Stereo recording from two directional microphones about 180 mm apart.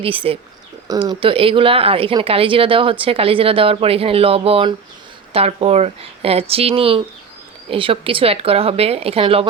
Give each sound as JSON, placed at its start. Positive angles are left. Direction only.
{"t": 0.0, "sound": "speech", "side_deg": -30}